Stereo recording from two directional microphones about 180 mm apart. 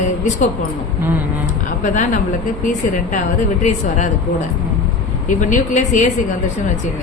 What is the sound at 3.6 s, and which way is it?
Speech, 40° left (ahead or behind).